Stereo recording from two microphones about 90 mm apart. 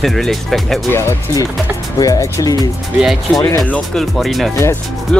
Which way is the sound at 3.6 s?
15° left (ahead or behind).